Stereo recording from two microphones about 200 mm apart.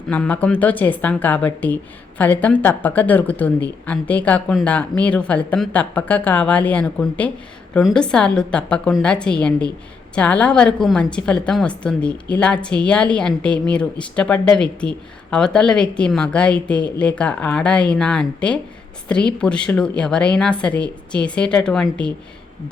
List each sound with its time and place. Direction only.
0.1 s a woman's voice: 5° left (ahead or behind)